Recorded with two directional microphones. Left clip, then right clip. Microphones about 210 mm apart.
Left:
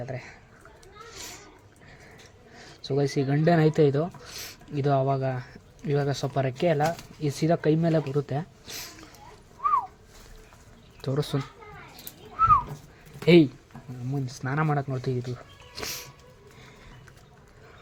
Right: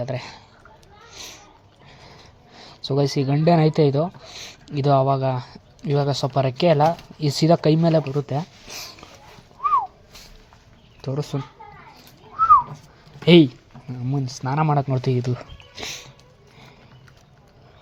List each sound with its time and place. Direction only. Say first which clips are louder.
0.0 s speech: right 8 dB; 15° right (ahead or behind)
1.1 s a sound: right 4 dB; 5° right (ahead or behind)
2.6 s speech: right 5 dB; 10° right (ahead or behind)
11.0 s speech: right 1 dB; centre (ahead or behind)
13.2 s speech: right 4 dB; 10° right (ahead or behind); by 15.4 s 25° right (ahead or behind)
15.7 s music: right 2 dB; 5° right (ahead or behind)